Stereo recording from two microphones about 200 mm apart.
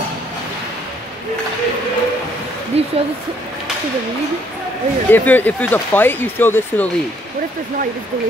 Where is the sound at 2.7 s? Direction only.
30° right (ahead or behind).